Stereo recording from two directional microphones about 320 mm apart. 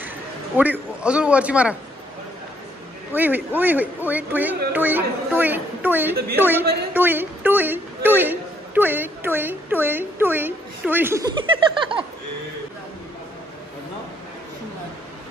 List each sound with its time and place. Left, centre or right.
0.6 s speech: centre
3.1 s a woman's voice: centre